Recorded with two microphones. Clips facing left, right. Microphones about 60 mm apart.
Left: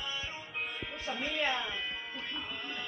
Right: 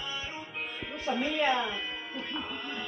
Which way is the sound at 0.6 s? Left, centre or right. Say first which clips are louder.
Left 1 dB; centre.